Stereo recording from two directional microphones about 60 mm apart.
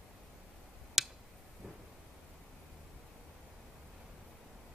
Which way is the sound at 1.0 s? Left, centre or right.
Centre.